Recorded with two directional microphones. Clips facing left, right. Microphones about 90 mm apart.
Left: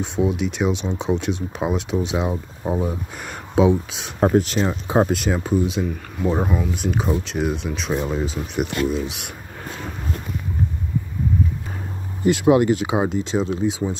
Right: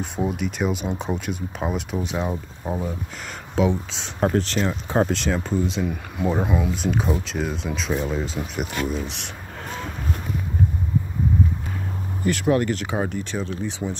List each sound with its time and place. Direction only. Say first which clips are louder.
0.0 s speech: left 4 dB; centre (ahead or behind)
12.3 s speech: left 5 dB; 15° left (ahead or behind)